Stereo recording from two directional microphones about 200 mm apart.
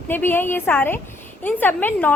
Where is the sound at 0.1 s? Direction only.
10° left (ahead or behind).